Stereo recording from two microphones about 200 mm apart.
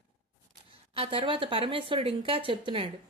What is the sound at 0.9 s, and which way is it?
A woman's voice, 25° right (ahead or behind).